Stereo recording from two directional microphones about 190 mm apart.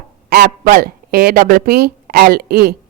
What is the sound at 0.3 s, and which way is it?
Speech, 50° right (ahead or behind).